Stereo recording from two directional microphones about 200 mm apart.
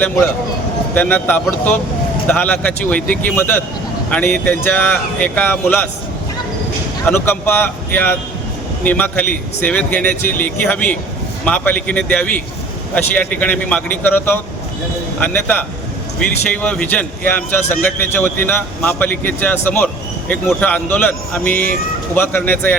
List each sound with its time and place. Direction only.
0.9 s a man's voice: 10° left (ahead or behind)
7.0 s a man's voice: 10° left (ahead or behind)
21.5 s speech: 45° left (ahead or behind)
22.1 s a man's voice: 10° left (ahead or behind)